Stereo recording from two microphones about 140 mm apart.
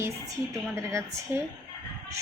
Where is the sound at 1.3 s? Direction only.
15° right (ahead or behind).